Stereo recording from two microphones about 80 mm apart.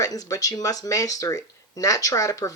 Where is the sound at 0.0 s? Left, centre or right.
Left.